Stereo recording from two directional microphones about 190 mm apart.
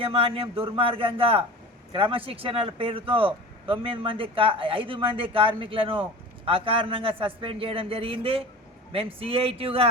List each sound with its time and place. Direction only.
0.0 s speech: 30° right (ahead or behind)